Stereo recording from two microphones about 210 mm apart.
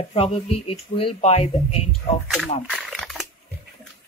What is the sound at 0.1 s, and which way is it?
Speech, 30° left (ahead or behind).